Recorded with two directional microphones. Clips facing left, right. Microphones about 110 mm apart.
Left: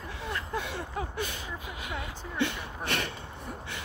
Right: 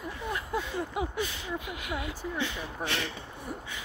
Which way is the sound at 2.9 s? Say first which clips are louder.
Left 3 dB; 55° left (ahead or behind).